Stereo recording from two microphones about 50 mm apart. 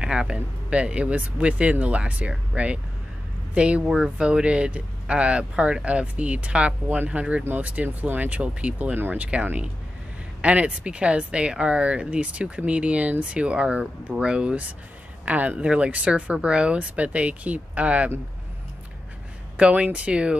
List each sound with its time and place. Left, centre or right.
0.0 s speech: centre
15.2 s speech: right
19.5 s speech: right